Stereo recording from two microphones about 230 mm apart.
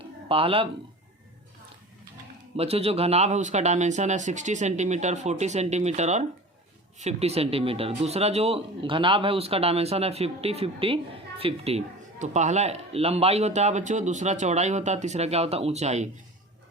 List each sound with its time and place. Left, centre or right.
0.3 s speech: right
2.6 s speech: right